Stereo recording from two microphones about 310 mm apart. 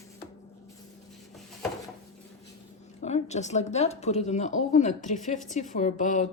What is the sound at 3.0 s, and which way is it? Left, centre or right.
Speech, left.